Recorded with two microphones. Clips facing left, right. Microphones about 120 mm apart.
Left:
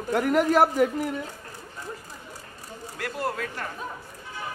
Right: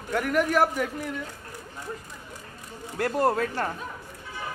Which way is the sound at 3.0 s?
40° right (ahead or behind).